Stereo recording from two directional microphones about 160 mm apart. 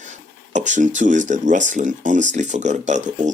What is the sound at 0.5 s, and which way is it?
Speech, 50° right (ahead or behind).